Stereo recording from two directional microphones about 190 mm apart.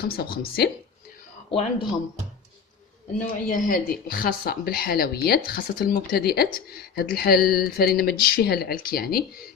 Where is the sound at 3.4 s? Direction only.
50° left (ahead or behind).